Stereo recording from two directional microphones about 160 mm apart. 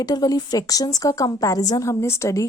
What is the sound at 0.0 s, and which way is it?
Speech, 25° left (ahead or behind).